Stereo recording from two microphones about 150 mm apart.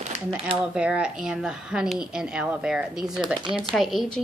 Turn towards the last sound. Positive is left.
turn(degrees=0)  # may be behind; listen again after turning